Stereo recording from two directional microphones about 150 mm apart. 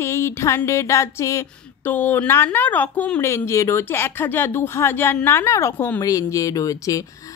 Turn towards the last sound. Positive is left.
turn(degrees=25)  # may be behind; listen again after turning